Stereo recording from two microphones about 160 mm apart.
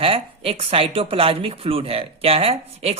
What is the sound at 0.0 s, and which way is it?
Speech, 35° right (ahead or behind).